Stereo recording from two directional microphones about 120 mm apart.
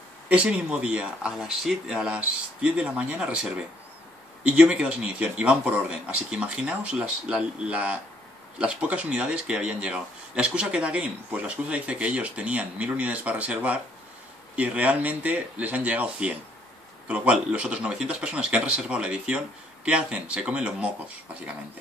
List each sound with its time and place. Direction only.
0.3 s speech: 10° right (ahead or behind)